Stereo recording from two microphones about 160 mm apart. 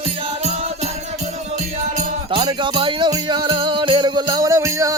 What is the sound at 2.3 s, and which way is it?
Music, 30° right (ahead or behind).